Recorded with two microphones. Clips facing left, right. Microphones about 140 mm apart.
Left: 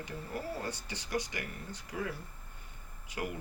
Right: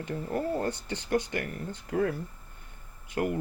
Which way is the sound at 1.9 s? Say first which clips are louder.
Right 11 dB; 55° right (ahead or behind).